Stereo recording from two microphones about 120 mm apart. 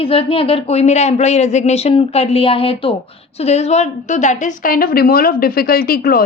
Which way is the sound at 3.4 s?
60° left (ahead or behind).